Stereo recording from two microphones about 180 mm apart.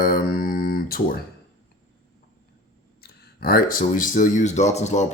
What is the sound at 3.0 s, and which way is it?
Speech, 55° left (ahead or behind).